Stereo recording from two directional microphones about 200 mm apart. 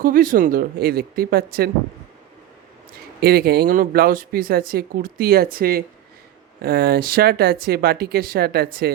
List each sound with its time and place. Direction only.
0.0 s speech: 45° right (ahead or behind)
3.2 s speech: 50° right (ahead or behind)